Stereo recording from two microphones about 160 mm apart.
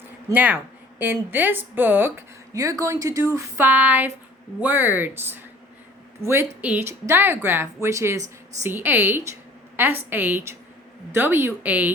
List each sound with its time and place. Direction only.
0.3 s a woman's voice: 10° right (ahead or behind)